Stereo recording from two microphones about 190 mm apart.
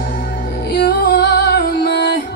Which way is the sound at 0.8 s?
50° left (ahead or behind).